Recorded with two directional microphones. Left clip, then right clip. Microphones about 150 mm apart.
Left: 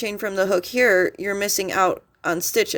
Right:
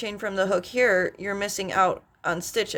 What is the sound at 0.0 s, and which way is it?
Speech, 40° left (ahead or behind).